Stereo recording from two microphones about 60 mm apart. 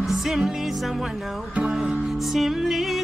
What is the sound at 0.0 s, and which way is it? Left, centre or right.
Music, centre.